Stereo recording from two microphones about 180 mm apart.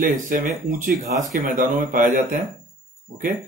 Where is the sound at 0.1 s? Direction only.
45° right (ahead or behind).